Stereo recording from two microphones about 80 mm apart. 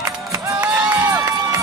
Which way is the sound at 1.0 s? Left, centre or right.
Right.